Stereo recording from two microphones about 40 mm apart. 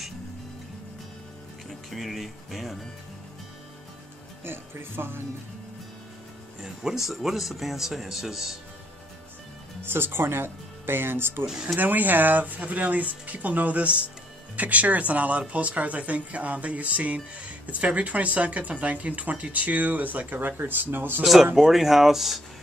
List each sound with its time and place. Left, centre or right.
1.7 s speech: centre
4.5 s speech: right
6.6 s speech: centre
9.8 s speech: right
11.6 s a woman's voice: right
21.5 s speech: centre